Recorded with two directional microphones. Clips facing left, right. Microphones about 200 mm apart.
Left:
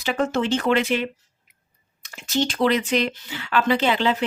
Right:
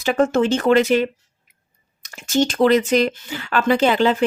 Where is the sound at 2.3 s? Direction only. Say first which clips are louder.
Right 5 dB; 45° right (ahead or behind).